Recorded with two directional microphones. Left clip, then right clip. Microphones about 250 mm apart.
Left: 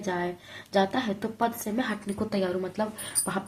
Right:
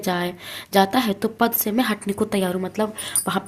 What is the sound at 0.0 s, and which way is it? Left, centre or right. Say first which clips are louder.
Speech: right 6 dB; right.